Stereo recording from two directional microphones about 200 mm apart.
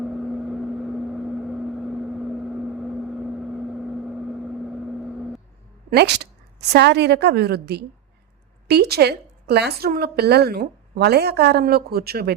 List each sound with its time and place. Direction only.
0.0 s vehicle: centre (ahead or behind)
5.9 s a woman's voice: 55° right (ahead or behind)